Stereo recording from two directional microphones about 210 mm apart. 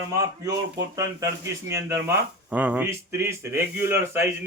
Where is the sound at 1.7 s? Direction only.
15° right (ahead or behind).